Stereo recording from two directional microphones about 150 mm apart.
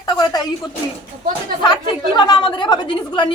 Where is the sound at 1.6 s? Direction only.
30° left (ahead or behind).